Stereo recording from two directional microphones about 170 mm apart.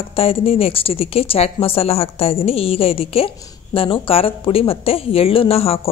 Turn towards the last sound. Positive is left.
turn(degrees=35)  # may be behind; listen again after turning